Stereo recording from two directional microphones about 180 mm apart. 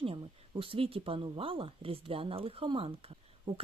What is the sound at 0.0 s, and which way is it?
Speech, 30° right (ahead or behind).